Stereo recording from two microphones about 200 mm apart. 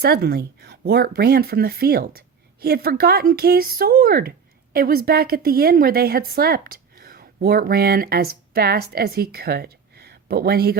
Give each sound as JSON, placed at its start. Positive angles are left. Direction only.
{"t": 0.0, "sound": "speech", "side_deg": -50}